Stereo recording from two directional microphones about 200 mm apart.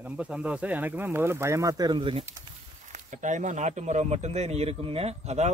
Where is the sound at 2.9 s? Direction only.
40° right (ahead or behind).